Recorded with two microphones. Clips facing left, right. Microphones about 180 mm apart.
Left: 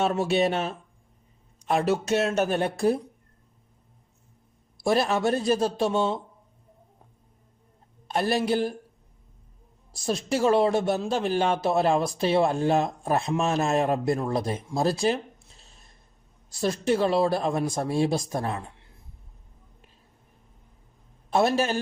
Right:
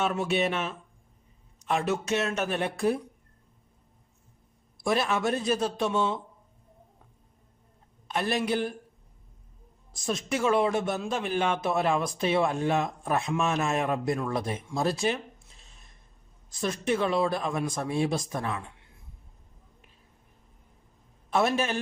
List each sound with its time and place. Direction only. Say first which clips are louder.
0.0 s speech: left 4 dB; 30° left (ahead or behind)
4.8 s speech: left 3 dB; 35° left (ahead or behind)
8.0 s a man's voice: left 3 dB; 35° left (ahead or behind)
10.1 s speech: left 4 dB; 35° left (ahead or behind)
16.6 s speech: left 4 dB; 35° left (ahead or behind)
21.2 s a man's voice: left 3 dB; 35° left (ahead or behind)